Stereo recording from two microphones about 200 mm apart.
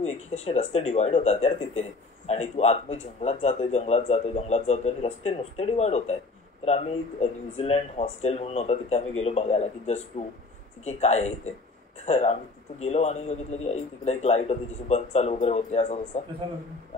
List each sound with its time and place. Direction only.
0.3 s a man's voice: 30° left (ahead or behind)